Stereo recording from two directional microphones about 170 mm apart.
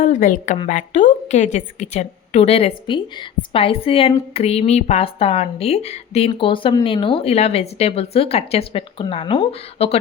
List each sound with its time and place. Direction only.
0.0 s a woman's voice: 50° left (ahead or behind)